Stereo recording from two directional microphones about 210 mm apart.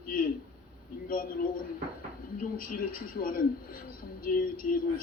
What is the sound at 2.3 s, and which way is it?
A man's voice, 40° left (ahead or behind).